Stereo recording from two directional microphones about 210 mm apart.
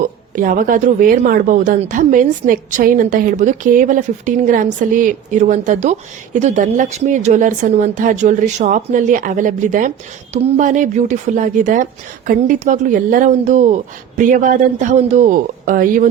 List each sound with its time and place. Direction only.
0.0 s a woman's voice: 40° right (ahead or behind)